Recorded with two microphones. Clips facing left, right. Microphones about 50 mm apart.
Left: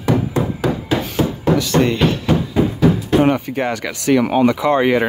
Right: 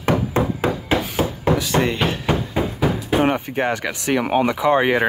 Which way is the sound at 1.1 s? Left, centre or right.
Centre.